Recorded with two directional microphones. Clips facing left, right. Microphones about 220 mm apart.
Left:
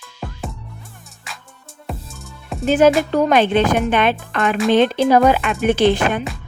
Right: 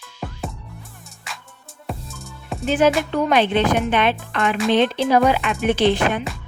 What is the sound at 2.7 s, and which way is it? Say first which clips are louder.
Music: left 4 dB; 45° left (ahead or behind).